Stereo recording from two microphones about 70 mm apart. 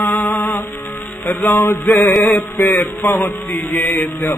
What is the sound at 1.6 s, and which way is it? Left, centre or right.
Music, left.